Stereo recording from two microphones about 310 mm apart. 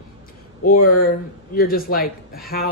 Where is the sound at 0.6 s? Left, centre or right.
Left.